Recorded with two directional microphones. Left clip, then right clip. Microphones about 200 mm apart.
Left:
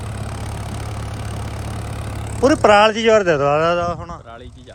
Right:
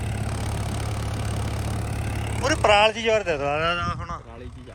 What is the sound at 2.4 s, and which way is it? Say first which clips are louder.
Speech: left 6 dB; 45° left (ahead or behind).